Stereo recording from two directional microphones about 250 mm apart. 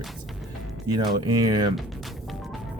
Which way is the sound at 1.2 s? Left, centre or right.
Centre.